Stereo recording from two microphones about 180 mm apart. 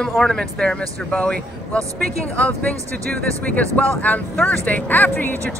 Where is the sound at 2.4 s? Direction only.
10° left (ahead or behind).